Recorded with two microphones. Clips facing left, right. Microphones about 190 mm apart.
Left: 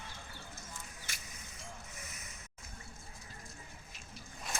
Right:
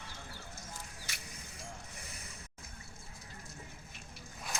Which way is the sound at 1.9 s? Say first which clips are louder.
Right 1 dB; 30° right (ahead or behind).